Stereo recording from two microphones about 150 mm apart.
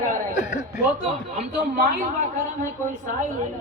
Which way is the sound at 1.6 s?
60° right (ahead or behind).